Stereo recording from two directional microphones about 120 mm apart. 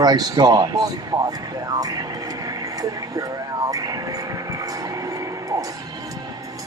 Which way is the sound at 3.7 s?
30° right (ahead or behind).